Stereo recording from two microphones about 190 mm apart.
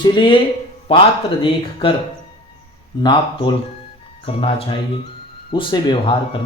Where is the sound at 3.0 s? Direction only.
25° left (ahead or behind).